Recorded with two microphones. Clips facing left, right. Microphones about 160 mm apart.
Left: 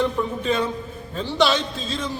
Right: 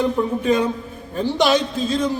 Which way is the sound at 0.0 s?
15° right (ahead or behind).